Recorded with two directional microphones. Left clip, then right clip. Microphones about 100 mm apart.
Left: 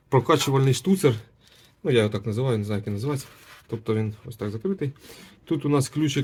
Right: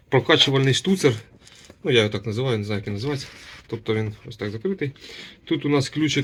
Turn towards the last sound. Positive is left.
turn(degrees=5)  # may be behind; listen again after turning